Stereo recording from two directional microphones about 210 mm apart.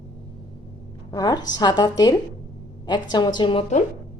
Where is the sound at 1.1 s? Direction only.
20° left (ahead or behind).